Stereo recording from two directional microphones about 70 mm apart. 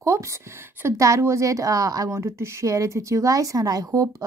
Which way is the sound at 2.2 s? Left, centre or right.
Right.